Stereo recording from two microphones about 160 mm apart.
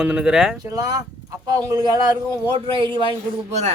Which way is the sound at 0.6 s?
20° right (ahead or behind).